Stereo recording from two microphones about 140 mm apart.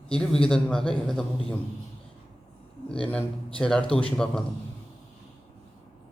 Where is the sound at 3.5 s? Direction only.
5° left (ahead or behind).